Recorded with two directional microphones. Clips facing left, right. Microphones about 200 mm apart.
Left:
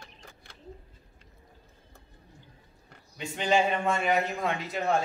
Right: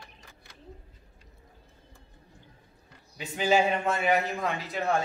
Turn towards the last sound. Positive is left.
turn(degrees=0)  # may be behind; listen again after turning